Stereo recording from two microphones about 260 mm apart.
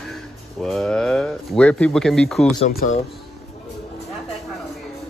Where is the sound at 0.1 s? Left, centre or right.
Centre.